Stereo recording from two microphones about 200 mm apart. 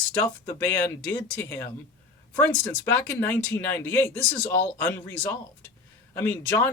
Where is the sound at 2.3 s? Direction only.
10° left (ahead or behind).